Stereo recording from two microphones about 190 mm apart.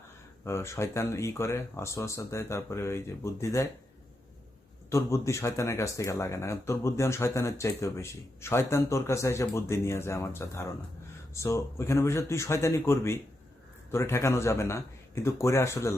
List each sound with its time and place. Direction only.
0.4 s speech: 15° left (ahead or behind)
4.9 s speech: 15° left (ahead or behind)